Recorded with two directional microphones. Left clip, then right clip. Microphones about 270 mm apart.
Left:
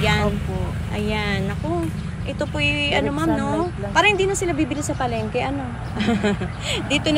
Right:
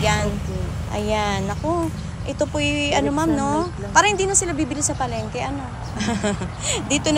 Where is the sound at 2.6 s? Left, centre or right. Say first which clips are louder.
Left 2 dB; centre.